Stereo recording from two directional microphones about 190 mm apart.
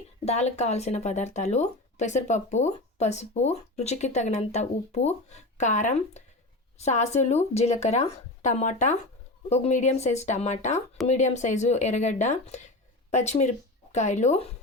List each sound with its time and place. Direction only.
0.3 s speech: 35° left (ahead or behind)